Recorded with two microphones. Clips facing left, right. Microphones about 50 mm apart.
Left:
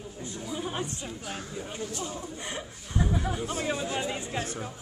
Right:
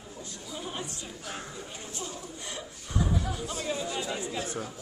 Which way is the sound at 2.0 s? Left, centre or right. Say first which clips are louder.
Left 3 dB; left.